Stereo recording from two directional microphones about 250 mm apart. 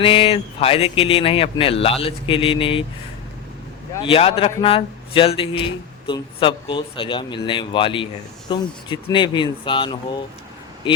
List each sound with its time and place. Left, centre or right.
0.0 s a man's voice: left
4.0 s a man's voice: left